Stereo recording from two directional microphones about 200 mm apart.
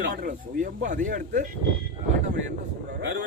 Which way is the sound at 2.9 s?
65° right (ahead or behind).